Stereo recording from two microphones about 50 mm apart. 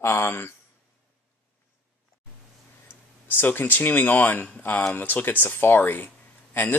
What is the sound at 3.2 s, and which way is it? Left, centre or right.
Speech, left.